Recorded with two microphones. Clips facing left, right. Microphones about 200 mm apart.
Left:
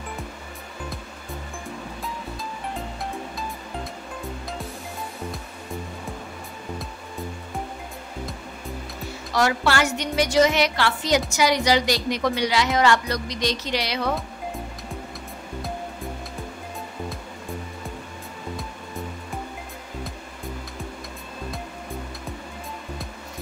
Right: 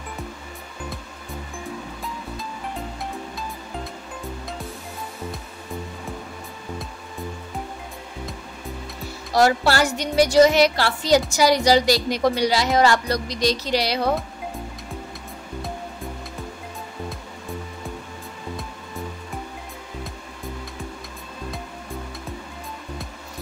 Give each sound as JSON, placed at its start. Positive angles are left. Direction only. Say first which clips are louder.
{"t": 9.3, "sound": "a woman's voice", "louder": "right 4 dB", "side_deg": -35}